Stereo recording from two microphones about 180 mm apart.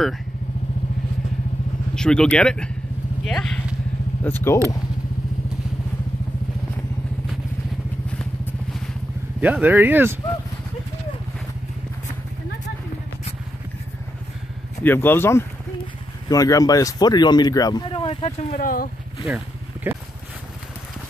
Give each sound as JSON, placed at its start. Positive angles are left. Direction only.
{"t": 2.0, "sound": "speech", "side_deg": 5}
{"t": 8.1, "sound": "vehicle", "side_deg": 5}
{"t": 9.4, "sound": "speech", "side_deg": -10}
{"t": 14.8, "sound": "speech", "side_deg": 10}
{"t": 18.6, "sound": "speech", "side_deg": 50}
{"t": 19.2, "sound": "boat", "side_deg": -10}